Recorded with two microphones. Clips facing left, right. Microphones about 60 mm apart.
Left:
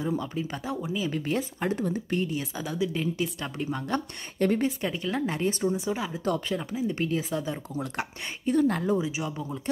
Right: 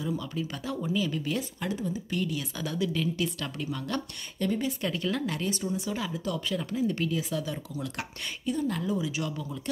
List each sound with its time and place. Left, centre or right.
0.0 s speech: left
0.7 s speech: centre
1.1 s speech: left
1.8 s speech: left
2.1 s speech: left
2.6 s speech: centre
4.4 s speech: left
4.6 s speech: left
6.7 s speech: centre
7.0 s speech: left
9.0 s speech: left